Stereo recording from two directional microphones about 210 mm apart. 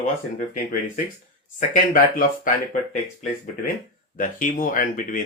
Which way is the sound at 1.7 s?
40° left (ahead or behind).